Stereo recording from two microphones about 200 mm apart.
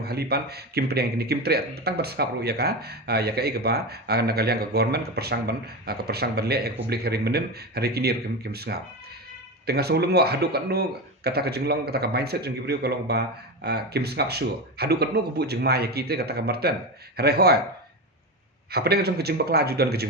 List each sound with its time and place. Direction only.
0.0 s speech: 50° right (ahead or behind)
18.7 s speech: 55° right (ahead or behind)